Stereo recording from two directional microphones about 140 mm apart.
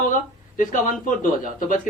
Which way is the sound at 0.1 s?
70° left (ahead or behind).